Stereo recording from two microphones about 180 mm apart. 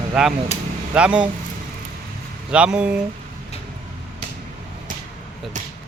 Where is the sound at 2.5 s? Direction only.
5° right (ahead or behind).